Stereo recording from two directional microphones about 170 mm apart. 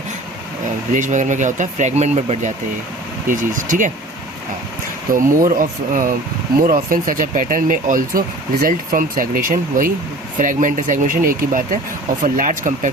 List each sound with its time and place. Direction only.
0.9 s speech: 45° right (ahead or behind)
5.1 s speech: 50° right (ahead or behind)